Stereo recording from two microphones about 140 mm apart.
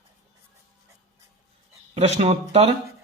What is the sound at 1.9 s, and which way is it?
Speech, 50° right (ahead or behind).